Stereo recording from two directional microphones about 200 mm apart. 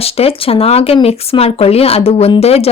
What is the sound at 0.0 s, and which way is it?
Speech, 30° left (ahead or behind).